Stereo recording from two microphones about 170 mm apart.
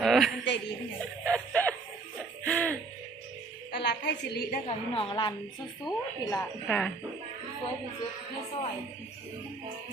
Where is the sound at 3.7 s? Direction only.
75° left (ahead or behind).